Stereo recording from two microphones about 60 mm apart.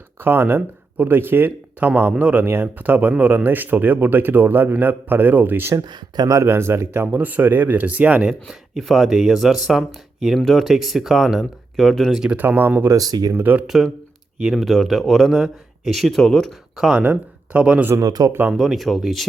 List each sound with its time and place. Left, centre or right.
0.2 s a man's voice: right
5.7 s speech: right
6.4 s speech: right
8.3 s speech: centre
12.4 s speech: right
13.0 s speech: right
13.3 s speech: right
13.7 s speech: centre
16.7 s speech: centre
17.0 s speech: right
17.9 s speech: right
18.5 s speech: centre